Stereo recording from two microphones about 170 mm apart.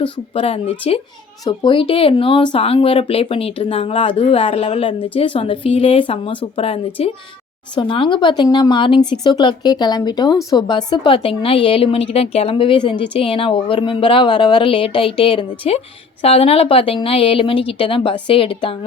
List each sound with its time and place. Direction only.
0.0 s speech: 35° left (ahead or behind)